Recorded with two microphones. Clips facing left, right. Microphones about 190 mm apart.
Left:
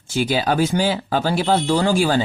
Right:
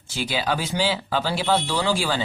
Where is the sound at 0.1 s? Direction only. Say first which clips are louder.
Left 6 dB; 45° left (ahead or behind).